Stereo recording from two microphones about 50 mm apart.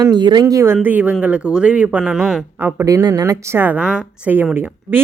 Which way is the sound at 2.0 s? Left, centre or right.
Centre.